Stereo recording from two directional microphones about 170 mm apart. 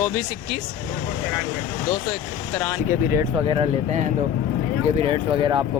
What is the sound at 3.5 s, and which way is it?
Speech, 35° right (ahead or behind).